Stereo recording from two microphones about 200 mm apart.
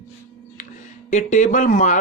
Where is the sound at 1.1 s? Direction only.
35° left (ahead or behind).